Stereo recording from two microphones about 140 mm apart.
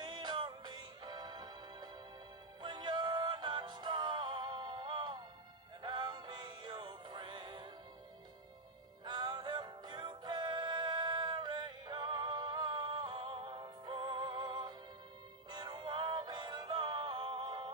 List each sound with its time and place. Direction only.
0.0 s music: 30° right (ahead or behind)
9.0 s music: 30° right (ahead or behind)